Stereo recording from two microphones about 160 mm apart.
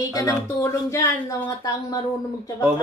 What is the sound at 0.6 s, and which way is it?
Speech, 20° left (ahead or behind).